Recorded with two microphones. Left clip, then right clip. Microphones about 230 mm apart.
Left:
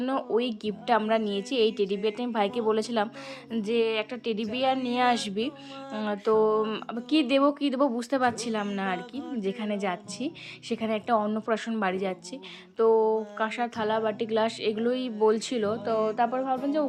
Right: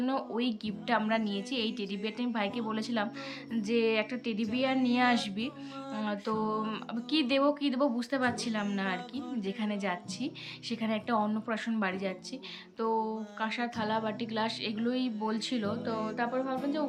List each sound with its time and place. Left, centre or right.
0.0 s a woman's voice: centre